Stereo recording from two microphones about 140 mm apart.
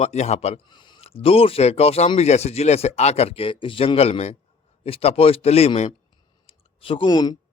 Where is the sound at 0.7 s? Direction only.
35° left (ahead or behind).